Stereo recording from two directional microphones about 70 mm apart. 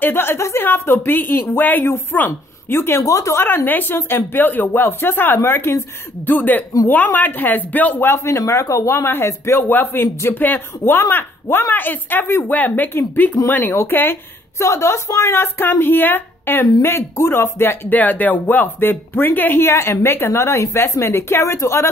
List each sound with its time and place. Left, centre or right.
0.0 s speech: left
3.1 s speech: left
3.4 s speech: left
6.2 s speech: left
8.2 s speech: left
14.6 s speech: left